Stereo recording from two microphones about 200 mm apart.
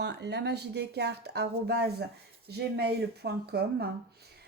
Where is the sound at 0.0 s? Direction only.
60° right (ahead or behind).